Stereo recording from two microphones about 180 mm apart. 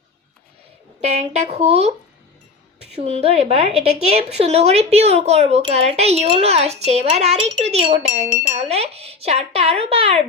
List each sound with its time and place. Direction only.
1.1 s a woman's voice: 35° right (ahead or behind)
3.0 s a woman's voice: 35° right (ahead or behind)